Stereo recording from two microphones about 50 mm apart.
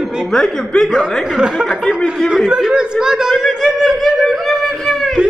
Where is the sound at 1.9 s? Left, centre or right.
Centre.